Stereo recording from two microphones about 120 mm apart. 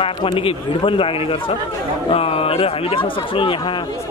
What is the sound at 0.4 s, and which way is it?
Speech, 50° left (ahead or behind).